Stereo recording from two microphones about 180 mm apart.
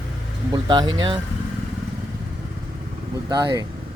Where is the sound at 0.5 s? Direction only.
25° right (ahead or behind).